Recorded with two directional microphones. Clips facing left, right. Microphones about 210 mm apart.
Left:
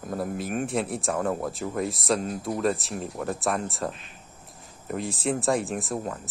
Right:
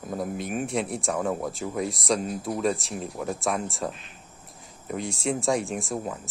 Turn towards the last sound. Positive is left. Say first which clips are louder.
# even
turn(degrees=0)  # may be behind; listen again after turning